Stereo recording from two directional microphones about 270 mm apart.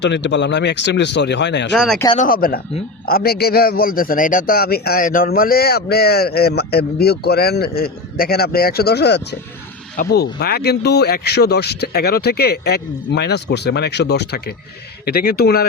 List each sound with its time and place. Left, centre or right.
0.0 s a man's voice: left
1.7 s speech: centre
2.0 s a man's voice: left